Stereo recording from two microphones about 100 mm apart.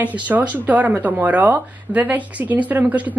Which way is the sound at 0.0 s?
15° right (ahead or behind).